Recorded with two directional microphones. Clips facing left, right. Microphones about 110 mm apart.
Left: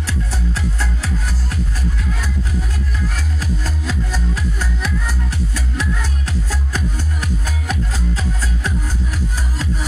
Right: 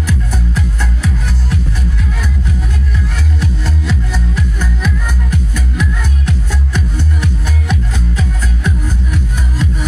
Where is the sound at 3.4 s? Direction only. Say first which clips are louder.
Right 3 dB; 35° left (ahead or behind).